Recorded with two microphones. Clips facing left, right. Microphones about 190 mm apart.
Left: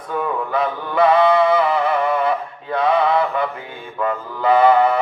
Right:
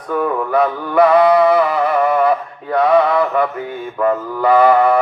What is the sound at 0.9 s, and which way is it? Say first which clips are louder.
Music: right 3 dB; 25° left (ahead or behind).